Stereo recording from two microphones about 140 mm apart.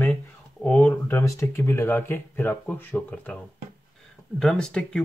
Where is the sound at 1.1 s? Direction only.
20° left (ahead or behind).